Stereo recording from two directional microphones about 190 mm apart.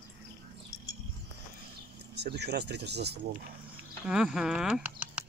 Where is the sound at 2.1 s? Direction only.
60° right (ahead or behind).